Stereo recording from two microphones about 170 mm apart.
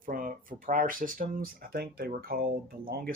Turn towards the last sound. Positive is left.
turn(degrees=-60)  # may be behind; listen again after turning